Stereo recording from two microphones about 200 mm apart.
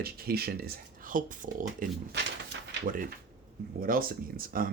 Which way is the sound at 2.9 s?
45° right (ahead or behind).